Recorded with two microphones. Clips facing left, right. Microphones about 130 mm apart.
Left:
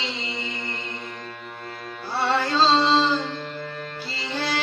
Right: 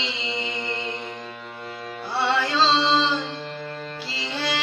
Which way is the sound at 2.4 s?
45° left (ahead or behind).